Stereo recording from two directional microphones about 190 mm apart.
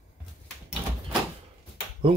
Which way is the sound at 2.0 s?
30° right (ahead or behind).